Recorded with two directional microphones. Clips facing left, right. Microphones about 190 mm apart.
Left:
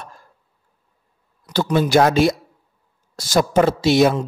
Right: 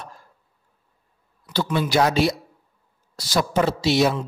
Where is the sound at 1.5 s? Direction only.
45° left (ahead or behind).